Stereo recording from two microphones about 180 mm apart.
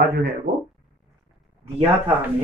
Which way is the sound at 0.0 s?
60° right (ahead or behind).